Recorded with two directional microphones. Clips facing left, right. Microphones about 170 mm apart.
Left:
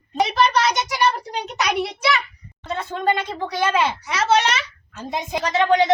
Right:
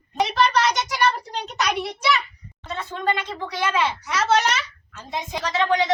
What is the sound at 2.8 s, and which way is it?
Speech, 40° left (ahead or behind).